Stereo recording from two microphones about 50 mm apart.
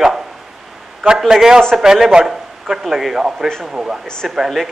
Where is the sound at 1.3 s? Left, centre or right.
Centre.